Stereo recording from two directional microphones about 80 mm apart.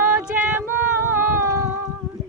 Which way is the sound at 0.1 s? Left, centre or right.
Right.